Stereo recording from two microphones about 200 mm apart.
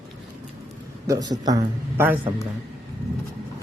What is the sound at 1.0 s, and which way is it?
Speech, 20° right (ahead or behind).